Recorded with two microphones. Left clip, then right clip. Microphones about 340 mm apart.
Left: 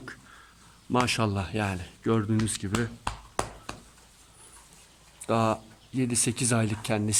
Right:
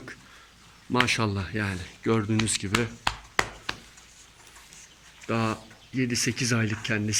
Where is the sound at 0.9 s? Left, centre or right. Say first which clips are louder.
Right 2 dB; centre.